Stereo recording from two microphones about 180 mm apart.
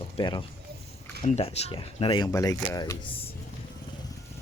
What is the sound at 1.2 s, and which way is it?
Speech, 35° left (ahead or behind).